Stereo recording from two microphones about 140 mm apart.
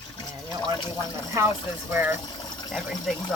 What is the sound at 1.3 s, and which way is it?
Speech, 20° right (ahead or behind).